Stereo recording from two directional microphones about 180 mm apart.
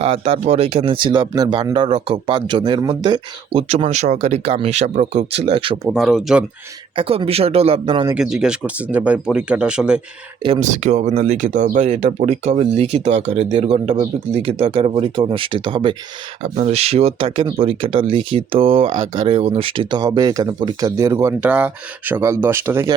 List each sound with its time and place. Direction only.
0.0 s speech: 35° right (ahead or behind)
5.9 s speech: centre (ahead or behind)
6.9 s speech: 30° right (ahead or behind)
8.1 s speech: 5° right (ahead or behind)
10.6 s speech: 40° right (ahead or behind); by 23.0 s 15° right (ahead or behind)